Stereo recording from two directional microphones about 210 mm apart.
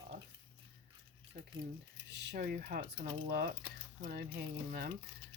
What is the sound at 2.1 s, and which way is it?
Speech, 55° right (ahead or behind).